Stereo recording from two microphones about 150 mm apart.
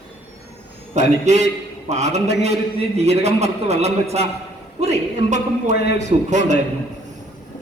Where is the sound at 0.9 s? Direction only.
50° right (ahead or behind).